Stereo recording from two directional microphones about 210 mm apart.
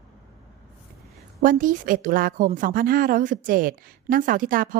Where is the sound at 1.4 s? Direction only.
40° right (ahead or behind).